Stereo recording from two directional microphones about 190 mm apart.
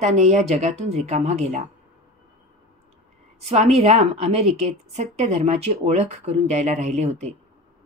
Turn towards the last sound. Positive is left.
turn(degrees=-35)  # may be behind; listen again after turning